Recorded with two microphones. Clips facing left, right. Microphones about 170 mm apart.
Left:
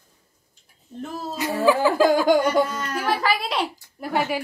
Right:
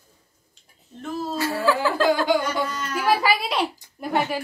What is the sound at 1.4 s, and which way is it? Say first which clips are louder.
Speech: left 4 dB; 15° left (ahead or behind).